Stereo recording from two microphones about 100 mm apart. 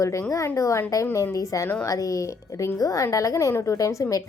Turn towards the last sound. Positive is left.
turn(degrees=35)  # may be behind; listen again after turning